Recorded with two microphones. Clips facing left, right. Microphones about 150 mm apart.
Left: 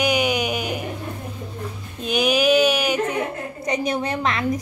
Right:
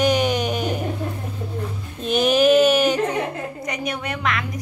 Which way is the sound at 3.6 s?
30° left (ahead or behind).